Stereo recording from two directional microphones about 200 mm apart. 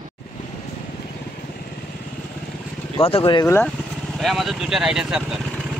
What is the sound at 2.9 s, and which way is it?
Speech, 30° left (ahead or behind).